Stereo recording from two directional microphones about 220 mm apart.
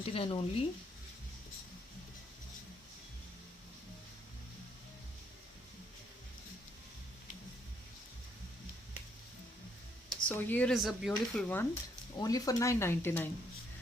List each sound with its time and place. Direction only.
0.0 s speech: 25° left (ahead or behind)
10.1 s speech: 5° left (ahead or behind)